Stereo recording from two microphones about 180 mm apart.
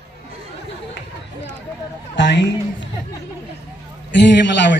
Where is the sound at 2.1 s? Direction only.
75° left (ahead or behind).